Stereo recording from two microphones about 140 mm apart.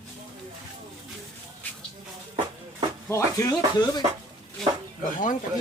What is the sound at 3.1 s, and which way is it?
Speech, 20° left (ahead or behind).